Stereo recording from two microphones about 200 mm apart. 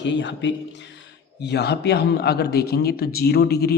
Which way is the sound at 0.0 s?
60° left (ahead or behind).